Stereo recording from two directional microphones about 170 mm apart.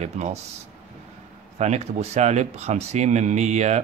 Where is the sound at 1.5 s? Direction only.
40° right (ahead or behind).